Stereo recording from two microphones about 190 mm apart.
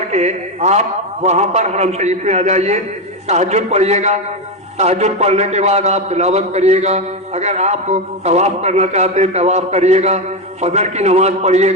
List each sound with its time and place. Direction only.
0.1 s a man's voice: 35° right (ahead or behind)